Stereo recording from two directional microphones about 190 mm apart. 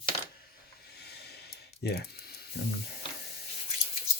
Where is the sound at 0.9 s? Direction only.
60° left (ahead or behind).